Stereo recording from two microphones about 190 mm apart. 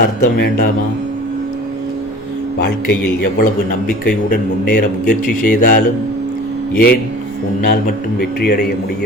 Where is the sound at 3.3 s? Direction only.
50° left (ahead or behind).